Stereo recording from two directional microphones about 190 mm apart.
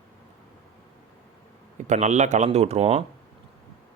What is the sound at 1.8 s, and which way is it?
Speech, 40° right (ahead or behind).